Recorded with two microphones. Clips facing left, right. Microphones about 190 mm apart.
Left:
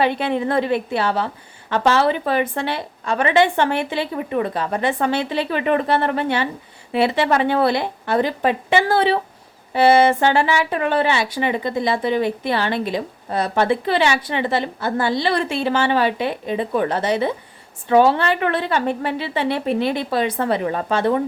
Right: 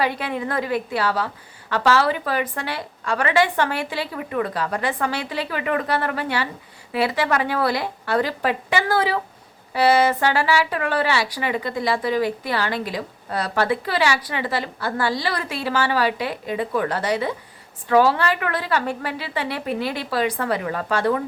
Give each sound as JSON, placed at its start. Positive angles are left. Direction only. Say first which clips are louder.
{"t": 0.0, "sound": "speech", "louder": "left 5 dB", "side_deg": 25}